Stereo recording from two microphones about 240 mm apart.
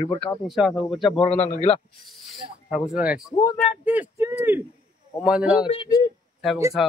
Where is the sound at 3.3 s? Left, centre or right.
Centre.